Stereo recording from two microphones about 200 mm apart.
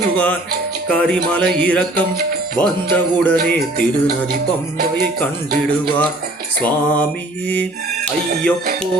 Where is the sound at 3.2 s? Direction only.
5° left (ahead or behind).